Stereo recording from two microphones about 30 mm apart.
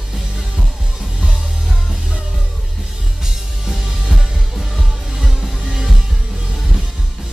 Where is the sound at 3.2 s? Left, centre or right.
Centre.